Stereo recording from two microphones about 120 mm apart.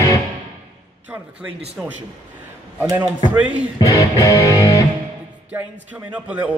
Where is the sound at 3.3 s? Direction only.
10° right (ahead or behind).